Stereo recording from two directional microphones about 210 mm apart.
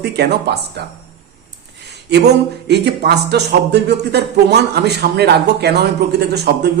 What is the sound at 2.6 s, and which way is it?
Speech, 55° right (ahead or behind).